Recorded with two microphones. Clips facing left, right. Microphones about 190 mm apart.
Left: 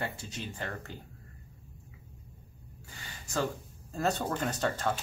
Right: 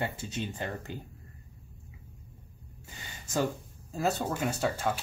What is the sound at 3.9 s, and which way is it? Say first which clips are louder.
Speech: right 1 dB; 5° right (ahead or behind).